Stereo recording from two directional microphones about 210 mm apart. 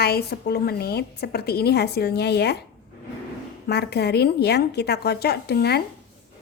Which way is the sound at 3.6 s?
50° left (ahead or behind).